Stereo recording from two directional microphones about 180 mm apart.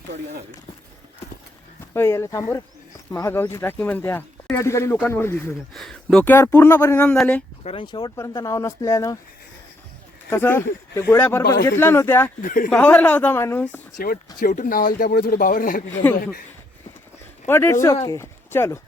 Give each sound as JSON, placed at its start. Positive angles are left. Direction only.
{"t": 1.9, "sound": "speech", "side_deg": 15}
{"t": 5.7, "sound": "speech", "side_deg": 0}
{"t": 7.6, "sound": "speech", "side_deg": 30}
{"t": 10.2, "sound": "speech", "side_deg": 10}
{"t": 12.4, "sound": "speech", "side_deg": 50}
{"t": 12.7, "sound": "speech", "side_deg": 5}
{"t": 14.3, "sound": "speech", "side_deg": 50}
{"t": 16.0, "sound": "speech", "side_deg": 10}
{"t": 17.4, "sound": "speech", "side_deg": 15}